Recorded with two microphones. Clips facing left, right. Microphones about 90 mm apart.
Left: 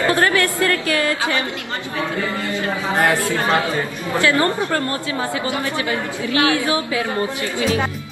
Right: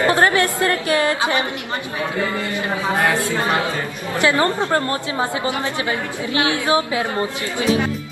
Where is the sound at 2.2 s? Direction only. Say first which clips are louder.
Even; 20° right (ahead or behind).